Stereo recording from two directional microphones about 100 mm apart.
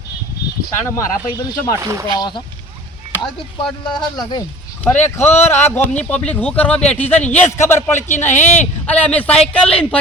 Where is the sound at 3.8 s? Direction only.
50° left (ahead or behind).